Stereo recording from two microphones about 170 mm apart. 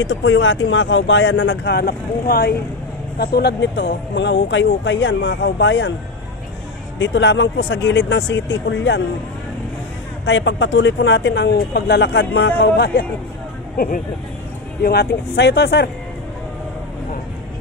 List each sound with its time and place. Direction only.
0.0 s speech: 90° left
7.0 s speech: 90° left
10.2 s speech: 90° left
13.7 s speech: 55° left (ahead or behind)
14.8 s speech: 70° left (ahead or behind)